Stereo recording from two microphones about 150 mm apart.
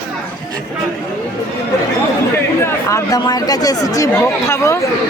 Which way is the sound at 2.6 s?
20° left (ahead or behind).